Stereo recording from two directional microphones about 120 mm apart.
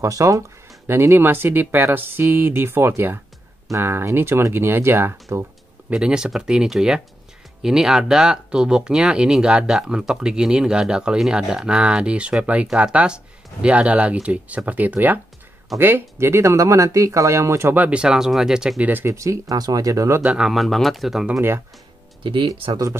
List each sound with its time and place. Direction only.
0.0 s speech: 25° right (ahead or behind)
5.3 s a sound: 20° right (ahead or behind)
5.9 s speech: 5° right (ahead or behind); by 20.2 s 25° right (ahead or behind)
20.2 s speech: 5° right (ahead or behind)
21.4 s speech: 20° right (ahead or behind)
22.2 s speech: 45° right (ahead or behind)